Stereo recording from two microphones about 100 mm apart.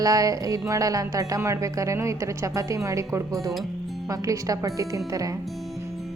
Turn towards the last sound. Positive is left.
turn(degrees=-35)  # may be behind; listen again after turning